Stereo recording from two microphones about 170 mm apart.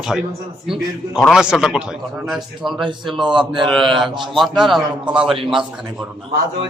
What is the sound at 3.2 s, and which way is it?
A man's voice, 25° right (ahead or behind).